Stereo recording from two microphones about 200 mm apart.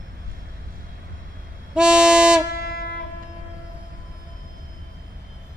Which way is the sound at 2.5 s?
50° left (ahead or behind).